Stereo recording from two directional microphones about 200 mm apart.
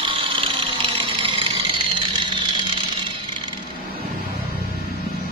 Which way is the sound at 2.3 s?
25° right (ahead or behind).